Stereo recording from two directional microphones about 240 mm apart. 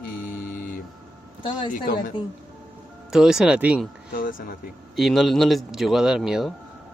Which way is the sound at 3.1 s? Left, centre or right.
Centre.